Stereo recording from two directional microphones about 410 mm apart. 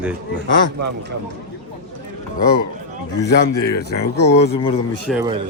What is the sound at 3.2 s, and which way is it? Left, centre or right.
Speech, centre.